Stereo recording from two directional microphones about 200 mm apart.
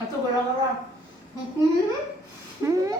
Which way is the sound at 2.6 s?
15° right (ahead or behind).